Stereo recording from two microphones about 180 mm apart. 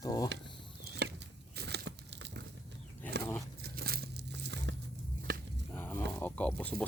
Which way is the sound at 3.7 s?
60° right (ahead or behind).